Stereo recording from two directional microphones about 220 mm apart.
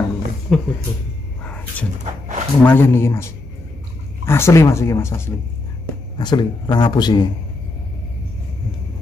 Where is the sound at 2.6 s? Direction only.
10° left (ahead or behind).